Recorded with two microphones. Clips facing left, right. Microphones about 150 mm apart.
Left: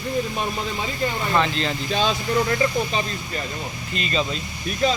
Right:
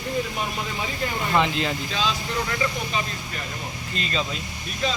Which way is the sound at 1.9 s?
45° left (ahead or behind).